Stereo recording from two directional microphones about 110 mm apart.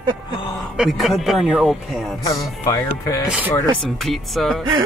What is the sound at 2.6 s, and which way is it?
Music, 30° left (ahead or behind).